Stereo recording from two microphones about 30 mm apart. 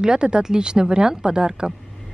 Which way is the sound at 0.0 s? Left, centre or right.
Right.